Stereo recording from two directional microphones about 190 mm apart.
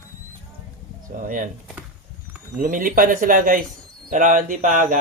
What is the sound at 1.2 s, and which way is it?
Speech, 45° right (ahead or behind).